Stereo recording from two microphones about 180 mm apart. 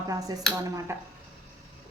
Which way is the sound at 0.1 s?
20° right (ahead or behind).